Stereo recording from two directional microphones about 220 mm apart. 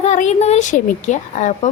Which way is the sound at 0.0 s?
30° left (ahead or behind).